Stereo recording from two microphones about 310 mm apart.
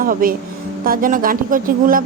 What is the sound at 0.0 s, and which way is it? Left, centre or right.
Speech, right.